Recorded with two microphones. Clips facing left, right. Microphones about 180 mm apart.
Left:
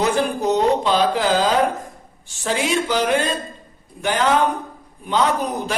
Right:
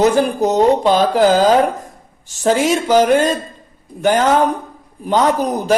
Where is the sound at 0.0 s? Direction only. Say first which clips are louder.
Right 6 dB; 40° right (ahead or behind).